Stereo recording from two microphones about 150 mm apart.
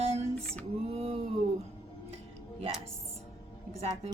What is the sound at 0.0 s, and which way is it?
Female singing, 45° right (ahead or behind).